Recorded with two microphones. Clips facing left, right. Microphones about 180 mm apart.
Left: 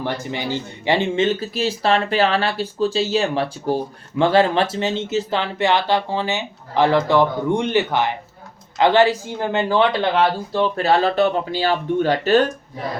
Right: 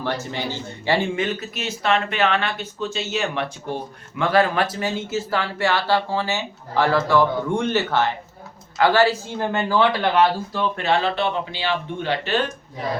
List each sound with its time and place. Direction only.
0.0 s speech: 15° left (ahead or behind)
10.5 s speech: 35° left (ahead or behind)